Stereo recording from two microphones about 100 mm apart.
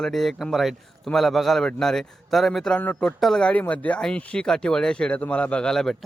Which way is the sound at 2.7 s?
15° left (ahead or behind).